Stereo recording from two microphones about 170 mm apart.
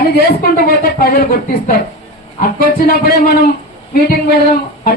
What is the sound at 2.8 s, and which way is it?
Speech, 65° left (ahead or behind).